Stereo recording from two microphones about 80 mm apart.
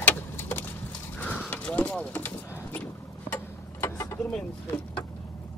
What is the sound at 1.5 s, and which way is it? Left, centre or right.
Vehicle, centre.